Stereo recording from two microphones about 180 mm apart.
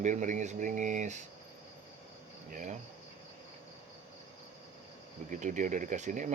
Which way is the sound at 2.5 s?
45° right (ahead or behind).